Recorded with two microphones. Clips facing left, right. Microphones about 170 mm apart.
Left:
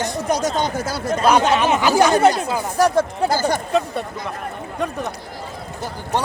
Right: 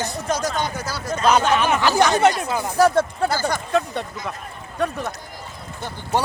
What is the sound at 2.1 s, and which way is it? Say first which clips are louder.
Speech: left 2 dB; 35° left (ahead or behind).